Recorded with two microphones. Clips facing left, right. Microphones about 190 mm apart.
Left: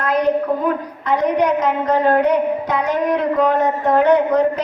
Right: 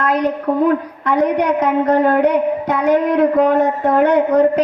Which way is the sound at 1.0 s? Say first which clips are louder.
Right 1 dB; 60° right (ahead or behind).